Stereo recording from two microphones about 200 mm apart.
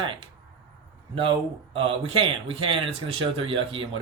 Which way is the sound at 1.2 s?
25° right (ahead or behind).